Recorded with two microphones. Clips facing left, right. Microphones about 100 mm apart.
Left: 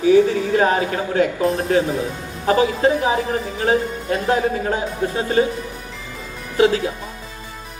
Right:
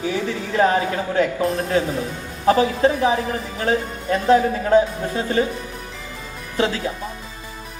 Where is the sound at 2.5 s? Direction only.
25° left (ahead or behind).